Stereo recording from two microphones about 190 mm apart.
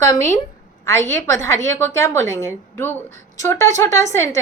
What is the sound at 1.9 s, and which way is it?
A woman's voice, 15° left (ahead or behind).